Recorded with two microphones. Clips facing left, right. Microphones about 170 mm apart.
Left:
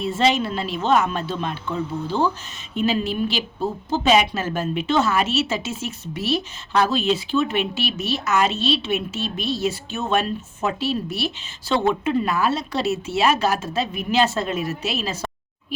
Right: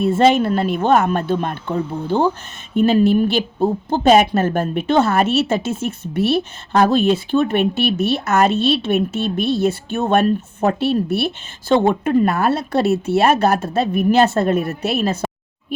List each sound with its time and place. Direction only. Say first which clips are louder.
0.0 s a woman's voice: right 6 dB; 55° right (ahead or behind)